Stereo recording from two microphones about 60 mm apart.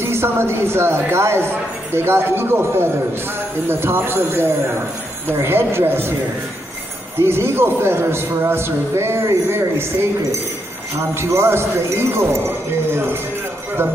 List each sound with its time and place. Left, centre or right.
0.0 s speech: right
7.2 s speech: right
11.1 s speech: right